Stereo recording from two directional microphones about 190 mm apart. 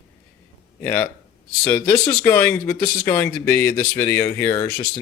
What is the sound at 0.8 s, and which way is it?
Speech, 10° left (ahead or behind).